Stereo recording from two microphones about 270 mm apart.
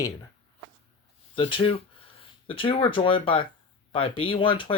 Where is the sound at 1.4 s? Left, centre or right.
Centre.